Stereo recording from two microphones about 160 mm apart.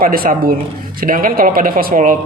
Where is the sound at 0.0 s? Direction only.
60° right (ahead or behind).